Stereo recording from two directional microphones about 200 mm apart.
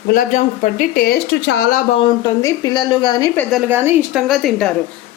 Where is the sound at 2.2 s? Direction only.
20° left (ahead or behind).